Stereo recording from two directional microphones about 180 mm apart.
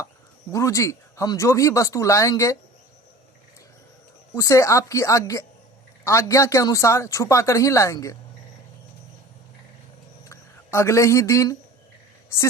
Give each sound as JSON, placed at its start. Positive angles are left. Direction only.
{"t": 0.5, "sound": "speech", "side_deg": 15}
{"t": 4.4, "sound": "speech", "side_deg": 15}
{"t": 10.2, "sound": "speech", "side_deg": 15}